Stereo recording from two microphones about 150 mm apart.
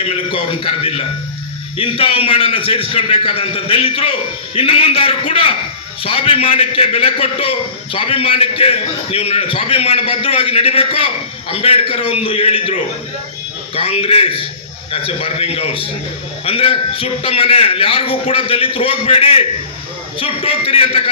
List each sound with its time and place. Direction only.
0.0 s a man's voice: 35° left (ahead or behind)